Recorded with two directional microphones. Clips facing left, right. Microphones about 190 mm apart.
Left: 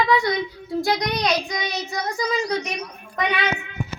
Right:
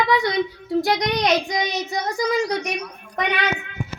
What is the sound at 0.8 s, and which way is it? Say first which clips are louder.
Speech: even; 20° right (ahead or behind).